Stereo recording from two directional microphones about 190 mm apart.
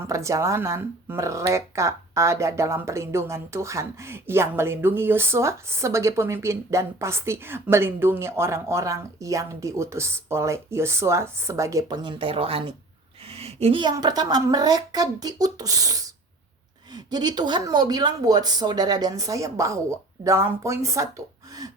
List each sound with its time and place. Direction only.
0.1 s a woman's voice: 15° right (ahead or behind)